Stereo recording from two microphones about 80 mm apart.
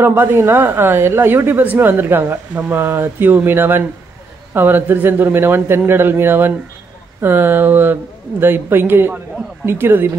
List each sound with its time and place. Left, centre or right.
0.0 s a woman's voice: right